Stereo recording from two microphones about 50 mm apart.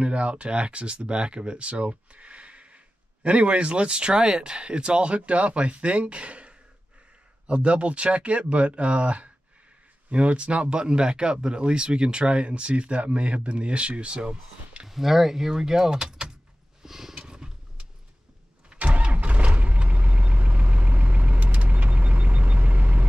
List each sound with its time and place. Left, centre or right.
0.0 s speech: right
14.9 s speech: centre
16.8 s wild animals: centre
17.1 s wild animals: centre
18.7 s vehicle: right